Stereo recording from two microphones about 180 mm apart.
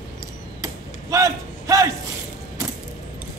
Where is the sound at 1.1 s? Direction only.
15° right (ahead or behind).